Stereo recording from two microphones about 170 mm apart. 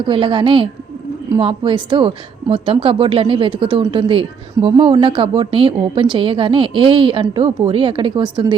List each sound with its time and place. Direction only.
0.0 s a woman's voice: 30° right (ahead or behind)